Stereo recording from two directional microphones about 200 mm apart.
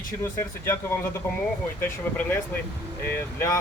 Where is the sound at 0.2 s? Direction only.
10° left (ahead or behind).